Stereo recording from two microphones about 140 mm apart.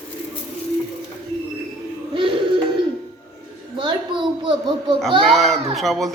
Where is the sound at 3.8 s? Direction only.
35° right (ahead or behind).